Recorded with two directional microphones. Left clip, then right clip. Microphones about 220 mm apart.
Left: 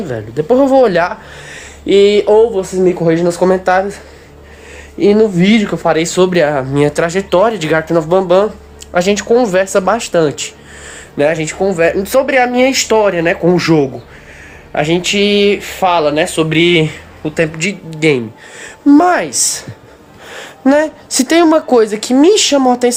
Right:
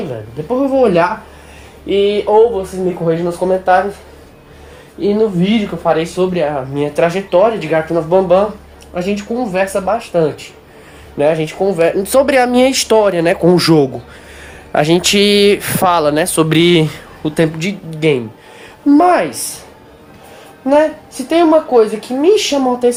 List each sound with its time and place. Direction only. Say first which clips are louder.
0.5 s speech: left 3 dB; 35° left (ahead or behind)
5.0 s speech: left 4 dB; 35° left (ahead or behind)
11.2 s speech: even; 10° left (ahead or behind)
12.2 s speech: even; 15° right (ahead or behind)
14.7 s speech: right 2 dB; 25° right (ahead or behind)
17.2 s speech: left 1 dB; 5° right (ahead or behind)
18.6 s a woman's voice: left 1 dB; 20° left (ahead or behind)
20.7 s speech: even; 40° left (ahead or behind)